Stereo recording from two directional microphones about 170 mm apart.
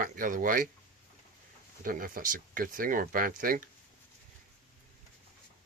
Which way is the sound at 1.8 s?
55° right (ahead or behind).